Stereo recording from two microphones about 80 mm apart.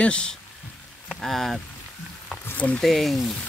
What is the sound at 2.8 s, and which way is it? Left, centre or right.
Speech, centre.